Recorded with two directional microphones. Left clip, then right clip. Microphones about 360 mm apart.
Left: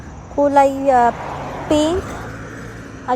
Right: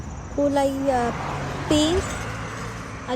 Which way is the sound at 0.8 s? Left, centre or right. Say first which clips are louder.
Left 9 dB; centre.